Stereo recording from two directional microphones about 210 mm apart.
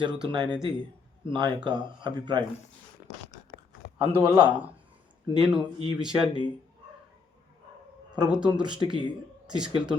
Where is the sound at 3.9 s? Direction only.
25° right (ahead or behind).